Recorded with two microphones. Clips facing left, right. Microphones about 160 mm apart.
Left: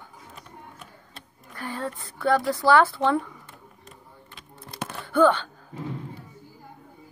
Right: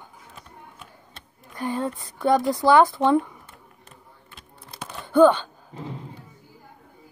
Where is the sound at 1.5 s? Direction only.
20° right (ahead or behind).